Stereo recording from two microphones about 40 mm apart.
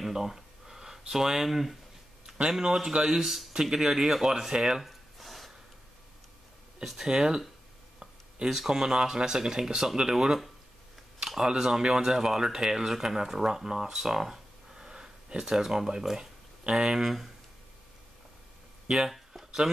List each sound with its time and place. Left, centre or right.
0.0 s a sound: centre
2.6 s speech: centre
4.8 s gasp: centre
6.8 s speech: centre
8.5 s speech: centre
19.0 s a sound: centre